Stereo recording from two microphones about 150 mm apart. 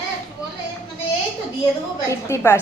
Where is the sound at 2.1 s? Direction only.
20° left (ahead or behind).